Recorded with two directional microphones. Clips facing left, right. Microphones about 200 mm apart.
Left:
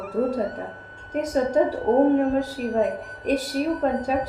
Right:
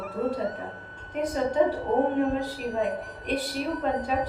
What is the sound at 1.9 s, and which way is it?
Speech, 45° left (ahead or behind).